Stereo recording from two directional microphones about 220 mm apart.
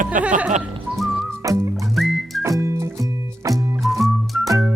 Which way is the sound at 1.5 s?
15° right (ahead or behind).